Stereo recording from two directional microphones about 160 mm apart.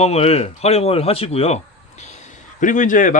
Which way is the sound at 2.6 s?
55° left (ahead or behind).